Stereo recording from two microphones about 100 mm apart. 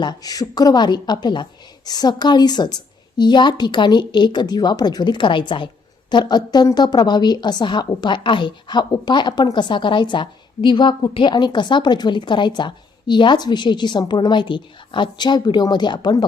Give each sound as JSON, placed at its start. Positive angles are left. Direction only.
{"t": 0.0, "sound": "a woman's voice", "side_deg": 40}